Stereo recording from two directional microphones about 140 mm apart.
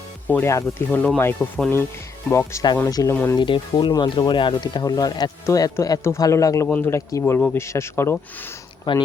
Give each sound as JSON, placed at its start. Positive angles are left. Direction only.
{"t": 0.3, "sound": "speech", "side_deg": 15}
{"t": 3.3, "sound": "speech", "side_deg": 35}
{"t": 8.8, "sound": "speech", "side_deg": 35}